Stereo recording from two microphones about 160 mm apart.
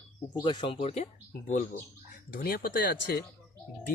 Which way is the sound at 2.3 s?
70° left (ahead or behind).